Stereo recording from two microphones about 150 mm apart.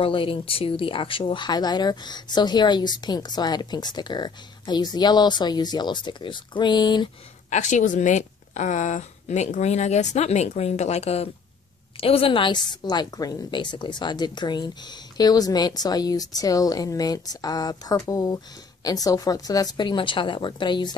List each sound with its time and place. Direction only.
0.0 s speech: 35° left (ahead or behind)
7.4 s a woman's voice: 55° left (ahead or behind); by 20.9 s 30° left (ahead or behind)